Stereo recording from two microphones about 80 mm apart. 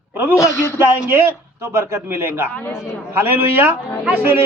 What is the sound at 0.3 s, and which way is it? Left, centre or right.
Speech, left.